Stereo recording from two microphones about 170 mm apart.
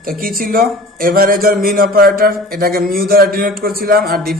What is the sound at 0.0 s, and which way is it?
Speech, 55° right (ahead or behind).